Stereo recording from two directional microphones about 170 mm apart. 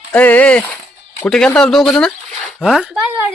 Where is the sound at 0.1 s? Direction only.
10° left (ahead or behind).